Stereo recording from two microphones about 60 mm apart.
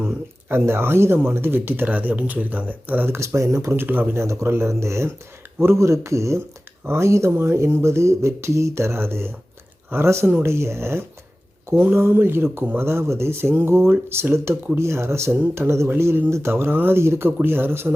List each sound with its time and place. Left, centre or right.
0.5 s speech: right
3.1 s speech: right
3.8 s speech: right
4.1 s speech: right